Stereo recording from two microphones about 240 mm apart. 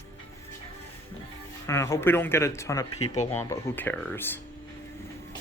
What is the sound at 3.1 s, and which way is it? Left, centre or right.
Speech, left.